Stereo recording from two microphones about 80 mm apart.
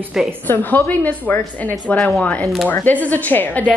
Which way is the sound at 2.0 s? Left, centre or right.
Centre.